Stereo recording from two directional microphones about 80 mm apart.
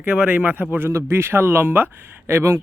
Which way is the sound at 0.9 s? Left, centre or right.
Right.